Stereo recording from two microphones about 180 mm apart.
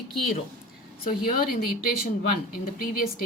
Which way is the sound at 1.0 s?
55° left (ahead or behind).